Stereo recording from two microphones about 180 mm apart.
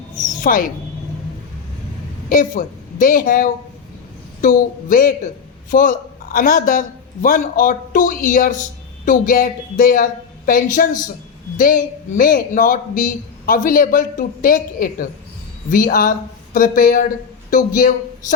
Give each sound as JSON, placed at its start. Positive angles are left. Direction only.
{"t": 0.4, "sound": "a man's voice", "side_deg": 50}
{"t": 2.3, "sound": "a woman's voice", "side_deg": 50}